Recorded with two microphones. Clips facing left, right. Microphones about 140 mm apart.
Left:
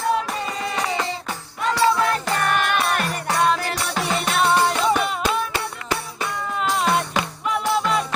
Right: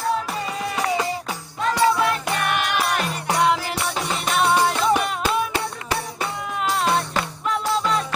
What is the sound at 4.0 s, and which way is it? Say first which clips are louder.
Music: left 2 dB; centre (ahead or behind).